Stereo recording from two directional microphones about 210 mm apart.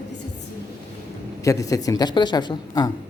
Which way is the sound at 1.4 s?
15° left (ahead or behind).